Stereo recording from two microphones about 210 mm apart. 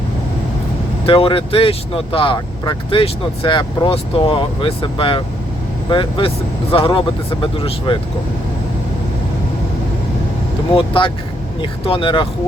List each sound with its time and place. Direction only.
1.0 s speech: 25° left (ahead or behind)
10.8 s speech: 25° left (ahead or behind)